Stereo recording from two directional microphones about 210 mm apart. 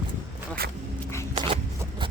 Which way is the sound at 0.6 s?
45° right (ahead or behind).